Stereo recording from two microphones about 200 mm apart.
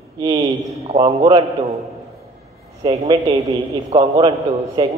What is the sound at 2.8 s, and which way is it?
A man's voice, 25° right (ahead or behind).